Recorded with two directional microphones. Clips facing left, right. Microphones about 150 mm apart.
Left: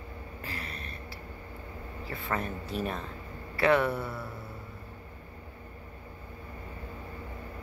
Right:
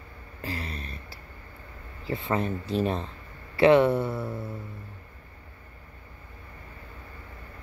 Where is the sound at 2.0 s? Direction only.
25° right (ahead or behind).